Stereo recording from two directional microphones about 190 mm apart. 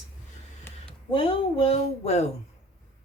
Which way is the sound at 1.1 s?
30° left (ahead or behind).